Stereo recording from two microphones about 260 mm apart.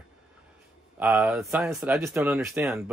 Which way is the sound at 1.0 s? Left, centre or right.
Centre.